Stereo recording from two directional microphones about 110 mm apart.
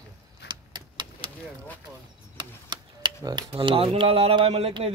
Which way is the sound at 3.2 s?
45° right (ahead or behind).